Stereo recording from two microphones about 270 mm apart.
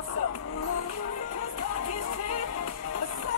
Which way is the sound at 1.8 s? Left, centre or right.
Left.